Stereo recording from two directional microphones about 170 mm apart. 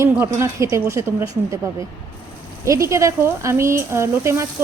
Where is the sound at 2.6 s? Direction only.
20° right (ahead or behind).